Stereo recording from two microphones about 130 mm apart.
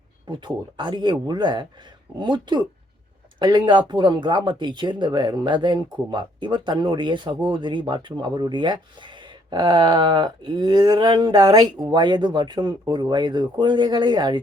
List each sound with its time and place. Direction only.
0.3 s speech: 35° right (ahead or behind)